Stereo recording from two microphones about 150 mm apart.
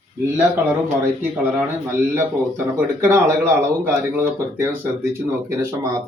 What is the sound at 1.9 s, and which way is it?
Speech, 15° right (ahead or behind).